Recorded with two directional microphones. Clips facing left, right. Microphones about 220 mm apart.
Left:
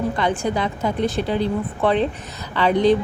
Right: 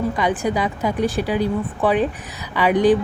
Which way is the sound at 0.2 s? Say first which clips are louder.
Right 1 dB; 15° right (ahead or behind).